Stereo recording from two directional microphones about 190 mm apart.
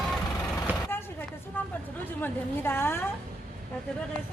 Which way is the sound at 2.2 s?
10° left (ahead or behind).